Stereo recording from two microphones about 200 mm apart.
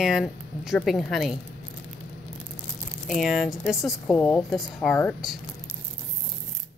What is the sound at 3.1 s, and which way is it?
Speech, centre (ahead or behind).